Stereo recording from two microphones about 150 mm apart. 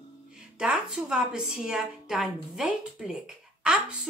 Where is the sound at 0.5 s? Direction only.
5° right (ahead or behind).